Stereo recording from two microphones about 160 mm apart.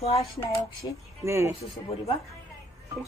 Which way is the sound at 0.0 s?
40° left (ahead or behind).